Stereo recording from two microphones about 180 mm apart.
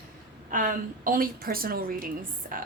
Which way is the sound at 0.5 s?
50° right (ahead or behind).